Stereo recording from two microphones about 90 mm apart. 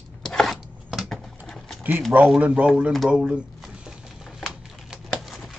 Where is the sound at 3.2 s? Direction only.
10° right (ahead or behind).